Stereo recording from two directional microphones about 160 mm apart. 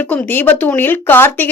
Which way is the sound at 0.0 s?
10° left (ahead or behind).